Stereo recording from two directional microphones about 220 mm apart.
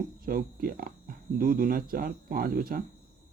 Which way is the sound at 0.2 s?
40° right (ahead or behind).